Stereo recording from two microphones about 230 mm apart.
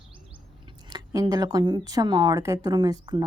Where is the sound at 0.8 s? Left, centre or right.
Centre.